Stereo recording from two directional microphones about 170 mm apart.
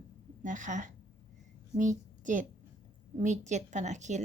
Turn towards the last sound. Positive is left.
turn(degrees=-45)  # may be behind; listen again after turning